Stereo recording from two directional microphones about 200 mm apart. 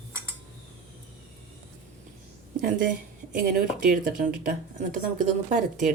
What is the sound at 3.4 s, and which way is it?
Speech, 45° right (ahead or behind).